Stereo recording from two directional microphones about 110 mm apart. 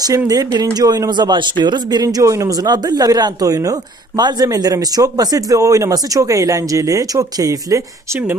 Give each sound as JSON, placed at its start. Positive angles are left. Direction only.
{"t": 0.3, "sound": "speech", "side_deg": -35}